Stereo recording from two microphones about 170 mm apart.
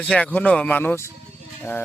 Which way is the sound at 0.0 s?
5° left (ahead or behind).